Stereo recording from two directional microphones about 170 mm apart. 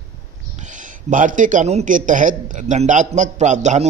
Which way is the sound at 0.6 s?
45° right (ahead or behind).